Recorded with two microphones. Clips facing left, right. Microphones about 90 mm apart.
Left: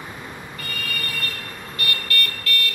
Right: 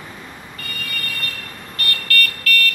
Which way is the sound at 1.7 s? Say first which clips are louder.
Right 3 dB; 20° left (ahead or behind).